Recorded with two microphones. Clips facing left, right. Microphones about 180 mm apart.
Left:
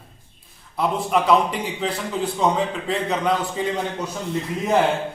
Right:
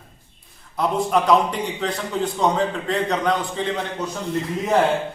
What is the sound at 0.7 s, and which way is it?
A man's voice, centre (ahead or behind).